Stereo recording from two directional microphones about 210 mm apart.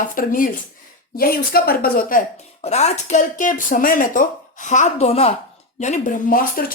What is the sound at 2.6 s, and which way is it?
A woman's voice, 30° left (ahead or behind).